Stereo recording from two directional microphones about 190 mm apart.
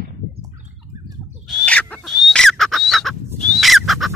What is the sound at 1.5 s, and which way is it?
Fowl, 5° left (ahead or behind).